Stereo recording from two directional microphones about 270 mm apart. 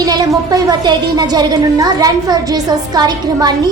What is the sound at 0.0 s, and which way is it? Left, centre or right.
A woman's voice, centre.